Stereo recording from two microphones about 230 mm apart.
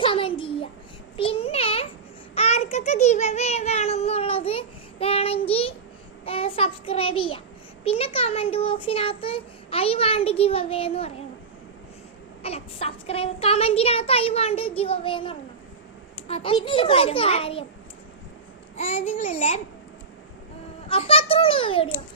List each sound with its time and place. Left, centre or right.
0.0 s a sound: left
2.3 s child singing: left
7.9 s a child's voice: left
12.4 s a child's voice: left
18.8 s a child's voice: left
20.8 s a child's voice: left